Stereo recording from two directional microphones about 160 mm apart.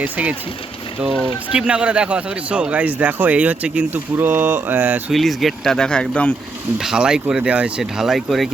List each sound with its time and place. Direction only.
0.0 s speech: 10° right (ahead or behind)
1.5 s speech: 5° right (ahead or behind)
5.1 s speech: centre (ahead or behind)